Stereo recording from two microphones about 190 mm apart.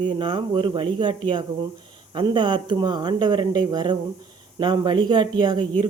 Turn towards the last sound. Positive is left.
turn(degrees=-25)  # may be behind; listen again after turning